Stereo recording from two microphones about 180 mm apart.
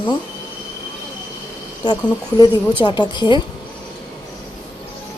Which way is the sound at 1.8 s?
25° left (ahead or behind).